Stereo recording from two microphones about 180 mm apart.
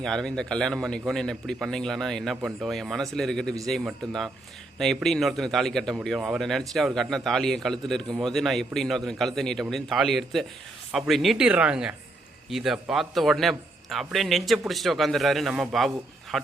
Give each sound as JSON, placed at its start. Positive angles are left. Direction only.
{"t": 0.0, "sound": "speech", "side_deg": 5}